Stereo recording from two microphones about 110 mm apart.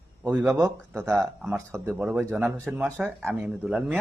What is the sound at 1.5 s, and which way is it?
Speech, 25° right (ahead or behind).